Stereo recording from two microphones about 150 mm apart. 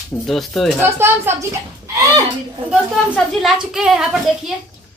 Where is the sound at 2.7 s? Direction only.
5° right (ahead or behind).